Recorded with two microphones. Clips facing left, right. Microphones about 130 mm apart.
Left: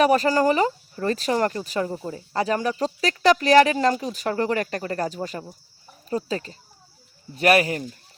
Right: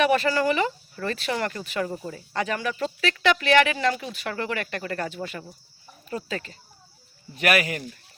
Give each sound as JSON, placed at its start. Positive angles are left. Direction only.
{"t": 0.0, "sound": "speech", "side_deg": 40}